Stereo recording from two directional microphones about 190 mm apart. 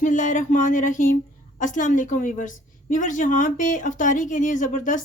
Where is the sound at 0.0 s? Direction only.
40° left (ahead or behind).